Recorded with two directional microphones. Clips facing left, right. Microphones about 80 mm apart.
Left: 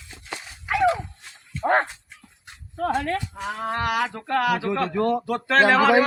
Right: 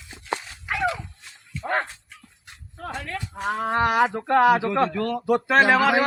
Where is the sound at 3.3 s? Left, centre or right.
Right.